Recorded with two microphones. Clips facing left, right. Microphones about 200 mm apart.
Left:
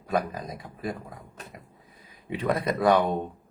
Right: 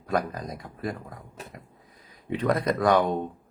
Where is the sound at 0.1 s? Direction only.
5° left (ahead or behind).